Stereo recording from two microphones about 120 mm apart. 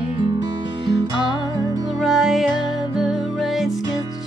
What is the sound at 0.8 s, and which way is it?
Music, 40° right (ahead or behind).